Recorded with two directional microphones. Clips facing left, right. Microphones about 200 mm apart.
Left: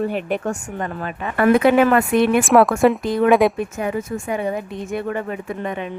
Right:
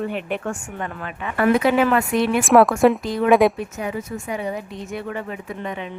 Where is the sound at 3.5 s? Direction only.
50° left (ahead or behind).